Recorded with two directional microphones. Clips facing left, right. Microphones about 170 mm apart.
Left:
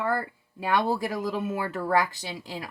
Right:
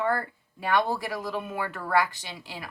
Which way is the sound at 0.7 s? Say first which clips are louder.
Left 1 dB; 40° left (ahead or behind).